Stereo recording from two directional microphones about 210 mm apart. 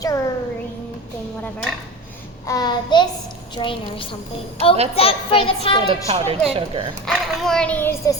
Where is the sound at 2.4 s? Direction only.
15° left (ahead or behind).